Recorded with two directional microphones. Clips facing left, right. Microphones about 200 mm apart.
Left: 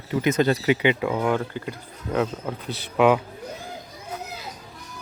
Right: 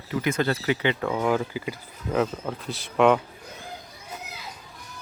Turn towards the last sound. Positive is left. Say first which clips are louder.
# left 1 dB
turn(degrees=0)  # may be behind; listen again after turning